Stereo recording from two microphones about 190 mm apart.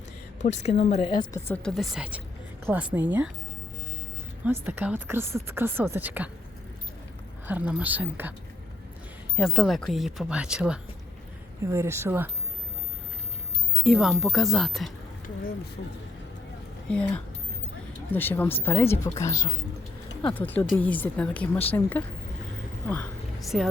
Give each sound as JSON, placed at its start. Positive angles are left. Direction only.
{"t": 0.6, "sound": "speech", "side_deg": 35}
{"t": 1.3, "sound": "speech", "side_deg": 10}
{"t": 4.4, "sound": "speech", "side_deg": -10}
{"t": 7.4, "sound": "speech", "side_deg": -5}
{"t": 9.3, "sound": "speech", "side_deg": -5}
{"t": 13.8, "sound": "speech", "side_deg": 0}
{"t": 16.9, "sound": "speech", "side_deg": 5}
{"t": 23.4, "sound": "speech", "side_deg": 0}